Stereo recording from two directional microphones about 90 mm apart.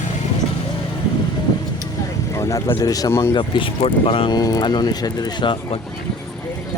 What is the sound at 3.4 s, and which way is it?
Speech, 80° left.